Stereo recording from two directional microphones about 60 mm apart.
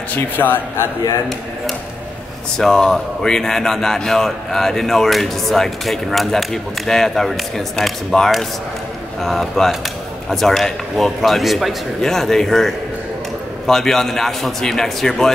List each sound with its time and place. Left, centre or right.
0.1 s a man's voice: left
2.5 s a man's voice: centre